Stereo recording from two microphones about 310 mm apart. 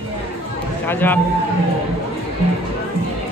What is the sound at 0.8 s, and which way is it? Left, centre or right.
Speech, centre.